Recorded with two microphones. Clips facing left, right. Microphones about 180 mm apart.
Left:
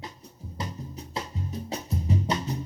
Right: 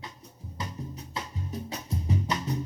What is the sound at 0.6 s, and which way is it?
Music, 30° left (ahead or behind).